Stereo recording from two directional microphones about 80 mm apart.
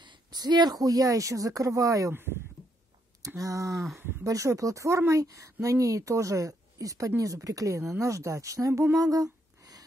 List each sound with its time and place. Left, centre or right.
0.0 s a woman's voice: right
3.3 s a woman's voice: right
3.7 s speech: centre
4.2 s a woman's voice: right
8.9 s a sound: right